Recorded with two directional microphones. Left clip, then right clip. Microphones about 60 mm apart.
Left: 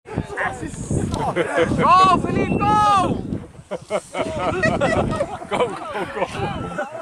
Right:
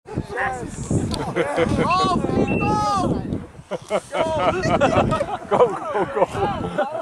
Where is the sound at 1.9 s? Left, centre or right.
Left.